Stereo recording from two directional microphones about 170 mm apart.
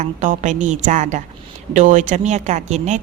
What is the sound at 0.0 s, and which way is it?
A woman's voice, 45° right (ahead or behind).